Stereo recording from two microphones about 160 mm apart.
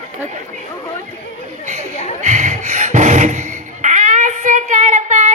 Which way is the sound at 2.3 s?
50° right (ahead or behind).